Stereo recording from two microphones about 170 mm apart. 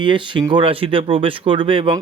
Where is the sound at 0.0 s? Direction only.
30° right (ahead or behind).